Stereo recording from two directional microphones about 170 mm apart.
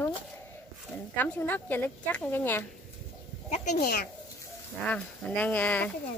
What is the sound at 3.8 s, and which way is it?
Speech, 60° left (ahead or behind).